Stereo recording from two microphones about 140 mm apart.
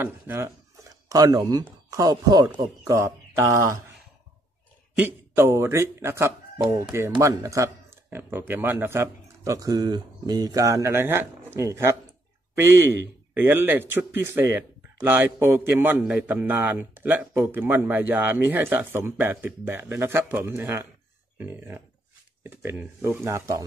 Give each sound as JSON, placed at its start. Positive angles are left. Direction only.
{"t": 0.0, "sound": "speech", "side_deg": -20}
{"t": 4.9, "sound": "a man's voice", "side_deg": -15}